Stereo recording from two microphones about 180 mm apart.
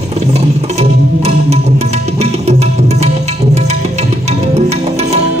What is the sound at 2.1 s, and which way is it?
Tabla, 35° right (ahead or behind).